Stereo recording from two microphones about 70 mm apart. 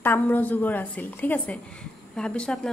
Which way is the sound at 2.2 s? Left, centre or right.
Centre.